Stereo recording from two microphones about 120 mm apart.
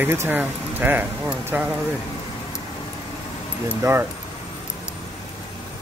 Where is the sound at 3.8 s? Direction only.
20° right (ahead or behind).